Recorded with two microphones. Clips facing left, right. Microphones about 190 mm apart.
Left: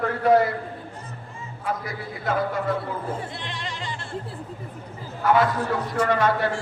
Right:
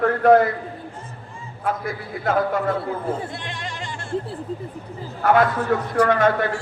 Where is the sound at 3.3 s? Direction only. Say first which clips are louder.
Right 2 dB; 50° right (ahead or behind).